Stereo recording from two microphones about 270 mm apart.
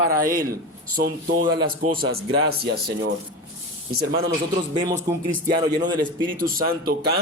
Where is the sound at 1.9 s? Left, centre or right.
Right.